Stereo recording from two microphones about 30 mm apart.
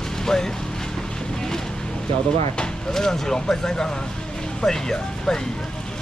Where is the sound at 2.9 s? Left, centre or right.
Centre.